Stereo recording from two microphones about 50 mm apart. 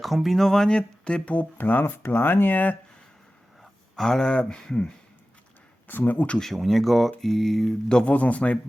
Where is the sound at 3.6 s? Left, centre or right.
Centre.